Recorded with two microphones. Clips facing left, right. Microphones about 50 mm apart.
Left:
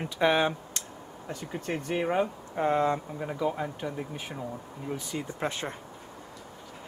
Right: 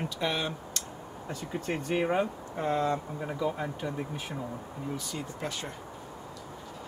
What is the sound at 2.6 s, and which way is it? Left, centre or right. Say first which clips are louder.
Speech: left 3 dB; left.